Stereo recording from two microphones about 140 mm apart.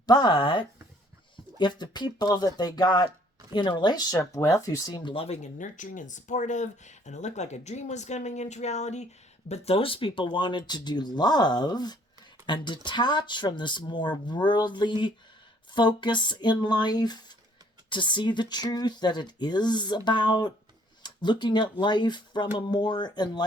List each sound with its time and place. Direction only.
0.0 s speech: 30° left (ahead or behind); by 9.0 s 55° left (ahead or behind)
9.5 s speech: 45° left (ahead or behind)